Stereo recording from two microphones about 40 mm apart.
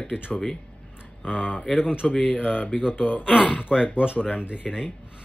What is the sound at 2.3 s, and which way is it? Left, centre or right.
Speech, left.